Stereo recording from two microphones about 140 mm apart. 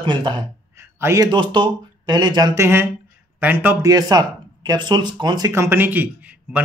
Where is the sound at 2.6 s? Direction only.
15° right (ahead or behind).